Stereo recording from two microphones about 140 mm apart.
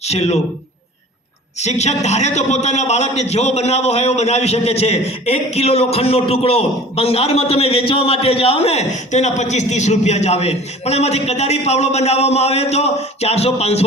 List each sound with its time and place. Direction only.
0.1 s a man's voice: 50° left (ahead or behind)
1.6 s a man's voice: 55° left (ahead or behind)